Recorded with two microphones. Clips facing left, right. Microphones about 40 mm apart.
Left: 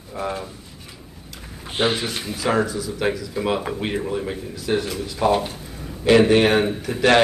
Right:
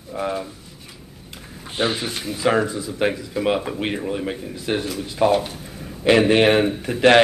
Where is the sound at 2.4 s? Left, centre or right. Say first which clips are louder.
Right 2 dB; centre.